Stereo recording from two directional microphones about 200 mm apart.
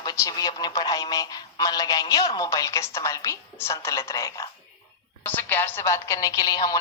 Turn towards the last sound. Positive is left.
turn(degrees=20)  # may be behind; listen again after turning